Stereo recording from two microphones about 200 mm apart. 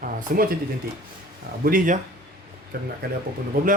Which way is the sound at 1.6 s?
45° right (ahead or behind).